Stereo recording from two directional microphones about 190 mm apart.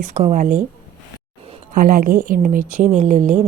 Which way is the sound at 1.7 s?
50° right (ahead or behind).